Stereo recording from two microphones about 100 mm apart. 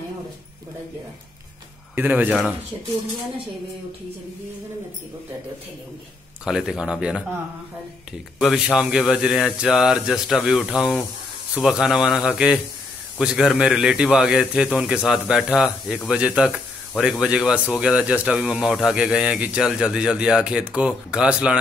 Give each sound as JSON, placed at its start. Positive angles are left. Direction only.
{"t": 2.0, "sound": "speech", "side_deg": -15}
{"t": 6.4, "sound": "speech", "side_deg": -5}
{"t": 8.4, "sound": "speech", "side_deg": -5}